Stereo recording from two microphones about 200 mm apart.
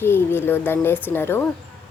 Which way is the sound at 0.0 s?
10° left (ahead or behind).